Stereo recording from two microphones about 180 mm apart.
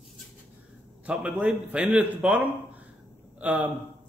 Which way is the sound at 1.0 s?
5° right (ahead or behind).